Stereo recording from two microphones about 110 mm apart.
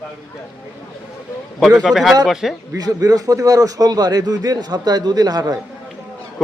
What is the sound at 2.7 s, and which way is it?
A man's voice, 35° right (ahead or behind).